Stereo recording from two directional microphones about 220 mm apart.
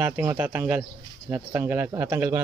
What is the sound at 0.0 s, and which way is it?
Speech, 5° right (ahead or behind).